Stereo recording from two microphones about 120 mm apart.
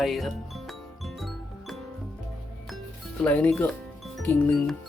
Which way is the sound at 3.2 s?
10° left (ahead or behind).